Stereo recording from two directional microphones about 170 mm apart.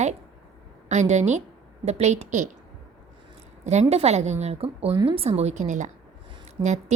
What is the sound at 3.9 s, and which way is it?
A woman's voice, 40° right (ahead or behind).